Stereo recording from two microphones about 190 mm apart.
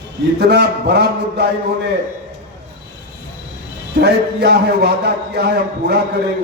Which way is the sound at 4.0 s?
55° right (ahead or behind).